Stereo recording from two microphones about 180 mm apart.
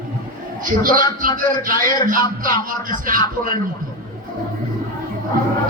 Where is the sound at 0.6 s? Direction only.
50° right (ahead or behind).